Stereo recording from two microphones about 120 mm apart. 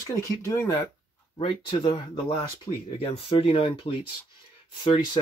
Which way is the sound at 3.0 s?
55° left (ahead or behind).